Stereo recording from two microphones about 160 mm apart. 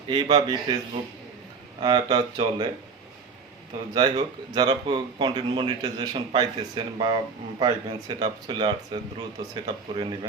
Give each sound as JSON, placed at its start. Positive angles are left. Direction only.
{"t": 0.1, "sound": "speech", "side_deg": -25}
{"t": 1.8, "sound": "speech", "side_deg": -25}
{"t": 3.9, "sound": "speech", "side_deg": -30}